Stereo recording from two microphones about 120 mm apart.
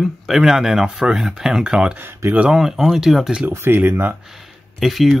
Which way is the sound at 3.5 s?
15° right (ahead or behind).